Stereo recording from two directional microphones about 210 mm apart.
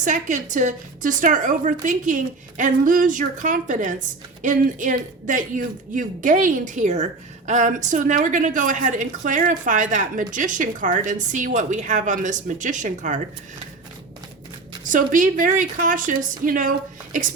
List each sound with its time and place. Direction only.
0.0 s speech: 35° right (ahead or behind)
14.8 s speech: 40° right (ahead or behind)